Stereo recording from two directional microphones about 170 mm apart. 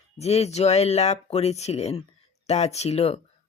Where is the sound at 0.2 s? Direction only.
40° left (ahead or behind).